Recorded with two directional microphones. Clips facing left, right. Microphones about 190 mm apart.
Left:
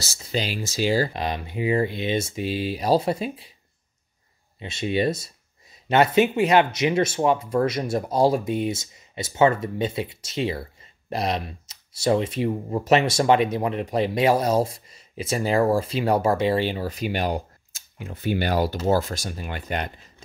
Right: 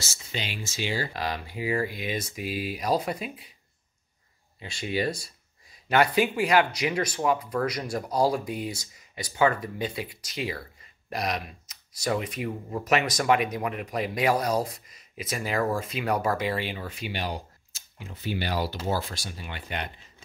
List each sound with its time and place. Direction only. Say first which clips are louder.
0.0 s speech: left 8 dB; 35° left (ahead or behind)
1.1 s speech: left 4 dB; 20° left (ahead or behind)
4.6 s speech: left 5 dB; 25° left (ahead or behind); by 19.9 s 45° left (ahead or behind)